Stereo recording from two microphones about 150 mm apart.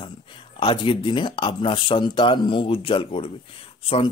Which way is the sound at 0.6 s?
35° left (ahead or behind).